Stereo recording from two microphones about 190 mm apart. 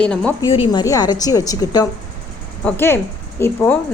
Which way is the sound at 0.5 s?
25° left (ahead or behind).